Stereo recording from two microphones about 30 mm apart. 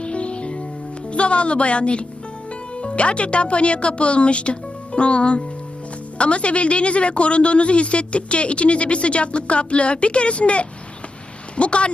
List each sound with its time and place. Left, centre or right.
0.0 s music: left
1.1 s a woman's voice: left